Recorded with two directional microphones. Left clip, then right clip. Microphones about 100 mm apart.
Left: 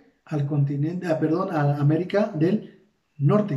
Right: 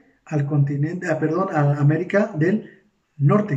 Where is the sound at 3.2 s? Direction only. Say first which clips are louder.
Right 2 dB; 15° left (ahead or behind).